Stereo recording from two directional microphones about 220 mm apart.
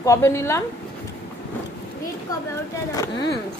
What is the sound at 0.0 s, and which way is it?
Speech, 15° left (ahead or behind).